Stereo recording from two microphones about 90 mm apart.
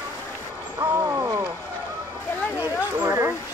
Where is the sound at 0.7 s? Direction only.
30° right (ahead or behind).